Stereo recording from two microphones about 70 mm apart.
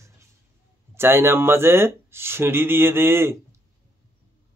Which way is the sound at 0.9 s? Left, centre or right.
Right.